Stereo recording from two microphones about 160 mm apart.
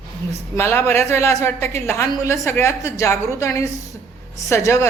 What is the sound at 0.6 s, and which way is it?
A woman's voice, 15° left (ahead or behind).